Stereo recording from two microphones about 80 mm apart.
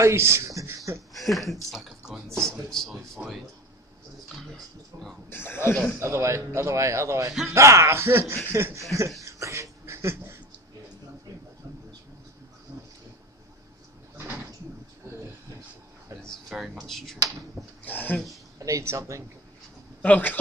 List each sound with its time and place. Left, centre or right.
0.0 s speech: right
1.1 s speech: centre
3.2 s speech: centre
4.9 s a man's voice: right
5.3 s speech: left
5.9 s a man's voice: right
9.2 s a sound: right
16.2 s a sound: centre
16.8 s speech: centre
17.8 s speech: left
18.6 s a man's voice: right
20.0 s speech: left